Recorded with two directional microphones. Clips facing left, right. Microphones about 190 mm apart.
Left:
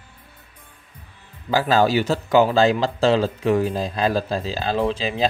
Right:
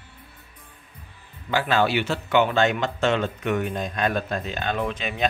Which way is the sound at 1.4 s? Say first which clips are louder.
Left 4 dB; 35° left (ahead or behind).